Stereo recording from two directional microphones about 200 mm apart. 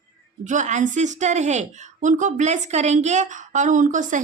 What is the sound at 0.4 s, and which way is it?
Speech, 35° right (ahead or behind).